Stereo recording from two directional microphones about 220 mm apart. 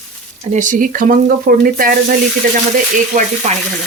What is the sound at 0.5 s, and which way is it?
Speech, 35° right (ahead or behind).